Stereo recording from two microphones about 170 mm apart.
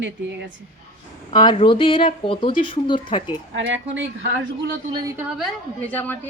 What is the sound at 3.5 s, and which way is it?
Speech, 90° right.